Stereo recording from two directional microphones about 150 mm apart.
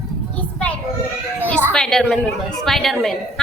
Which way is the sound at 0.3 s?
10° left (ahead or behind).